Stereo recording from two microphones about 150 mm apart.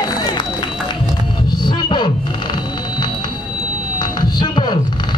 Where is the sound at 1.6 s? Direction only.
30° left (ahead or behind).